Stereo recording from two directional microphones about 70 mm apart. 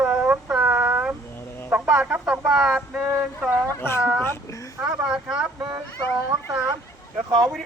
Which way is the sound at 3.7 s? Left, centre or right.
Left.